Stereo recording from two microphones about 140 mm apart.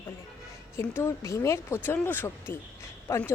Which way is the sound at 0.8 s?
20° left (ahead or behind).